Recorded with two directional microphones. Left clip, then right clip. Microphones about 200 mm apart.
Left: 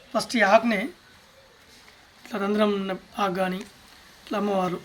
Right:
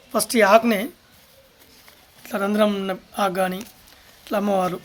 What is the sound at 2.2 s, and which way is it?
Speech, 55° right (ahead or behind).